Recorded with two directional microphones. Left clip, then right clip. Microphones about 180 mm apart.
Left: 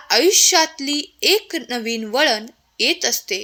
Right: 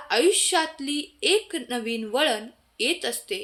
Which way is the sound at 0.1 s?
35° left (ahead or behind).